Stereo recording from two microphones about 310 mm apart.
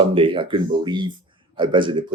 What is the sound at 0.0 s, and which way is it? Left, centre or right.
Speech, centre.